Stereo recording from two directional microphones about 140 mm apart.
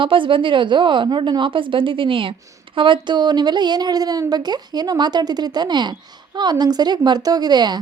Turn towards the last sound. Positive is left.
turn(degrees=-30)  # may be behind; listen again after turning